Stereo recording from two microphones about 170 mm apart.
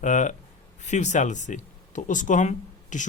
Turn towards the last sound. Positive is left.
turn(degrees=45)  # may be behind; listen again after turning